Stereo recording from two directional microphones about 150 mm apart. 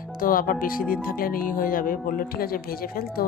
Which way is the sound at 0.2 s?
70° left (ahead or behind).